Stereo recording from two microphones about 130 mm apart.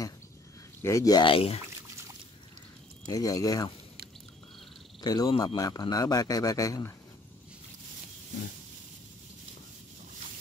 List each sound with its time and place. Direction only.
0.8 s a man's voice: 25° left (ahead or behind)
1.3 s speech: 50° left (ahead or behind)
3.1 s a man's voice: 25° left (ahead or behind)
5.0 s a man's voice: 30° left (ahead or behind)